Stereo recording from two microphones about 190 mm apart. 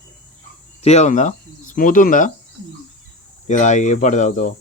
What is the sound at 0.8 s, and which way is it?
Speech, 35° left (ahead or behind).